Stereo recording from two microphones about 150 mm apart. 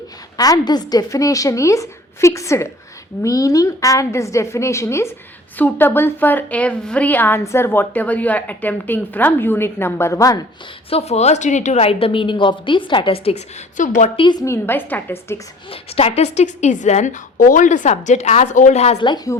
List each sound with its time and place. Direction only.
0.3 s a woman's voice: 25° left (ahead or behind)
10.8 s a woman's voice: 45° left (ahead or behind)
13.7 s a woman's voice: 55° left (ahead or behind)
14.2 s a woman's voice: 30° left (ahead or behind)
14.4 s a woman's voice: 15° left (ahead or behind)
15.7 s a woman's voice: 40° left (ahead or behind)
18.9 s a woman's voice: 30° left (ahead or behind)